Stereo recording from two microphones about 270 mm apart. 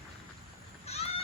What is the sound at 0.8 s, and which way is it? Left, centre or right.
Goose, left.